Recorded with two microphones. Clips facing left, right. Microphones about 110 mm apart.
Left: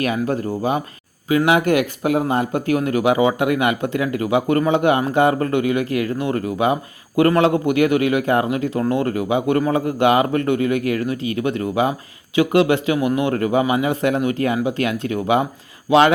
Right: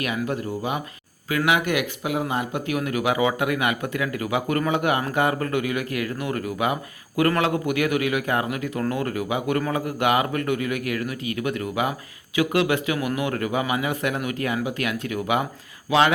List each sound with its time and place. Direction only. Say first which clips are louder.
0.0 s speech: left 6 dB; 35° left (ahead or behind)
1.3 s speech: left 6 dB; 25° left (ahead or behind)
1.5 s speech: left 6 dB; 40° left (ahead or behind)